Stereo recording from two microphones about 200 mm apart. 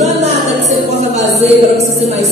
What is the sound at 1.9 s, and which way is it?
Music, 35° right (ahead or behind).